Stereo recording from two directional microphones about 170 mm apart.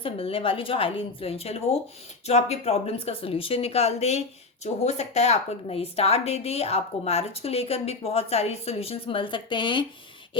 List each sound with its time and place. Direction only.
0.0 s a woman's voice: 30° left (ahead or behind)